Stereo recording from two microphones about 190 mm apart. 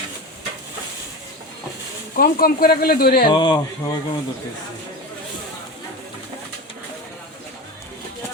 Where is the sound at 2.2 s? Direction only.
50° left (ahead or behind).